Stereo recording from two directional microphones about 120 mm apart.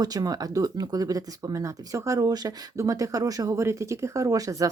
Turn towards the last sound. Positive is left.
turn(degrees=-30)  # may be behind; listen again after turning